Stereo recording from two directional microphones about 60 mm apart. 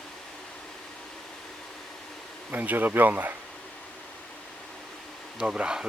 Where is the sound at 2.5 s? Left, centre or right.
Right.